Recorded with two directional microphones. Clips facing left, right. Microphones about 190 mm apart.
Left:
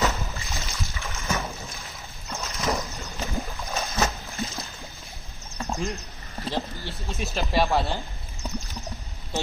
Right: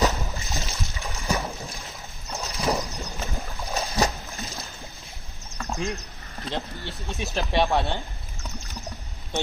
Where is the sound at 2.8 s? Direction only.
15° right (ahead or behind).